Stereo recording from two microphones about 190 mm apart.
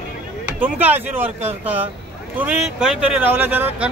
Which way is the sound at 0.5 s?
10° right (ahead or behind).